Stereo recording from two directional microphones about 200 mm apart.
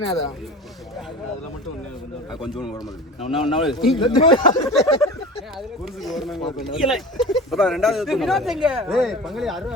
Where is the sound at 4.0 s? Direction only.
25° left (ahead or behind).